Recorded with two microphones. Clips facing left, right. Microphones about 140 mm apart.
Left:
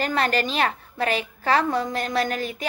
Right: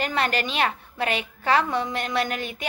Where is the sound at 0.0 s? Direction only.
40° left (ahead or behind).